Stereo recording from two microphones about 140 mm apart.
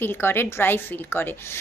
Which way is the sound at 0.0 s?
15° left (ahead or behind).